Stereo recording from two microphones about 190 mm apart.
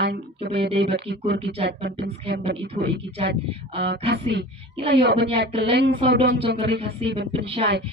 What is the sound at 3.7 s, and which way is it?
Speech, 60° right (ahead or behind).